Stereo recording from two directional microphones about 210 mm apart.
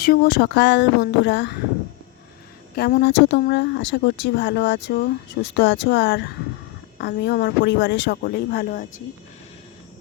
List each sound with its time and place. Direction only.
0.0 s speech: 50° left (ahead or behind)
2.7 s speech: 50° left (ahead or behind)